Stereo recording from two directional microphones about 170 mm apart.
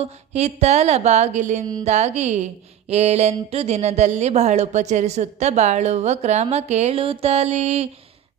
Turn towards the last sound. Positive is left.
turn(degrees=-40)  # may be behind; listen again after turning